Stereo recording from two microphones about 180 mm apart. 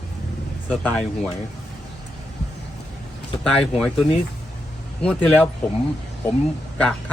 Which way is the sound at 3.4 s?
5° left (ahead or behind).